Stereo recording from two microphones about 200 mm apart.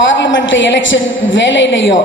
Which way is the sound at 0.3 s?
65° left (ahead or behind).